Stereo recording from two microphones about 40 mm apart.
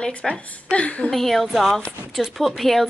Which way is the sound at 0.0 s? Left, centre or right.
Left.